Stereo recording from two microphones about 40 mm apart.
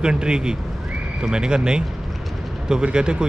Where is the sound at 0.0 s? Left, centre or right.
Right.